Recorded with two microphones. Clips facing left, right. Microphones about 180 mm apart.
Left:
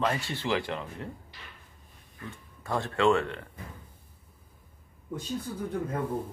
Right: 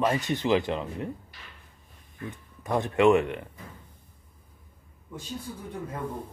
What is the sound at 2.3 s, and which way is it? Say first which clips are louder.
Speech: right 4 dB; 20° right (ahead or behind).